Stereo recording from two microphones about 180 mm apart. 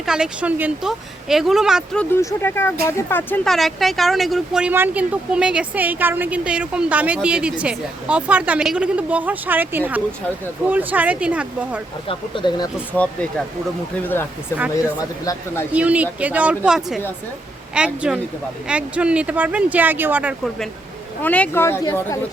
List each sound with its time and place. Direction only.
0.0 s speech: 5° right (ahead or behind)
2.1 s speech: 15° left (ahead or behind); by 11.8 s 5° right (ahead or behind)
12.0 s speech: 25° left (ahead or behind)
12.9 s speech: 5° left (ahead or behind)
15.7 s speech: 5° right (ahead or behind)
21.2 s speech: 10° left (ahead or behind)